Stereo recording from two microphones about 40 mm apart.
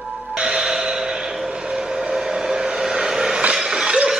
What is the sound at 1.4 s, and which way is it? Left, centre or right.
Vehicle, right.